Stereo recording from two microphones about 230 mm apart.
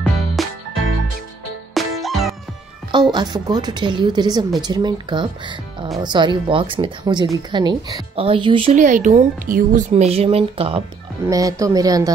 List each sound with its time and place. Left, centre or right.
0.4 s music: centre
1.7 s music: centre
2.9 s speech: centre
11.2 s a woman's voice: centre